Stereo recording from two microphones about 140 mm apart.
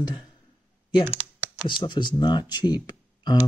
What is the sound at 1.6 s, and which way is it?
Speech, 35° left (ahead or behind).